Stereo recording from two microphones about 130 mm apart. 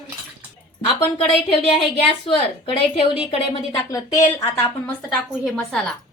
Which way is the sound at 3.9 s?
25° left (ahead or behind).